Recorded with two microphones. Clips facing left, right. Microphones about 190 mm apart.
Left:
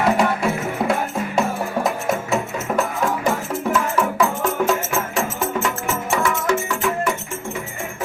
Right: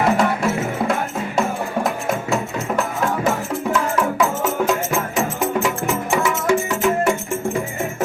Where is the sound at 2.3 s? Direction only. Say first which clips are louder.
Even; centre (ahead or behind).